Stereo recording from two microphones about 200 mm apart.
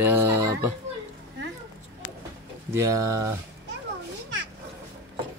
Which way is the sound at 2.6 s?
15° right (ahead or behind).